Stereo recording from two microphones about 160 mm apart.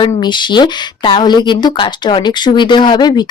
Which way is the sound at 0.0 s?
30° left (ahead or behind).